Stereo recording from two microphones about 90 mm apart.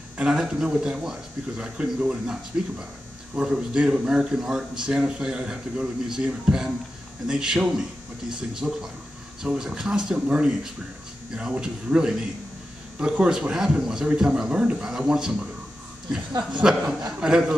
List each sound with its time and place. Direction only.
0.2 s speech: 10° right (ahead or behind)
16.6 s speech: 10° right (ahead or behind)